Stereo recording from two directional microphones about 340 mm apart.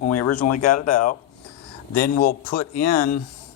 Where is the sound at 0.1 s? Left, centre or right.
Left.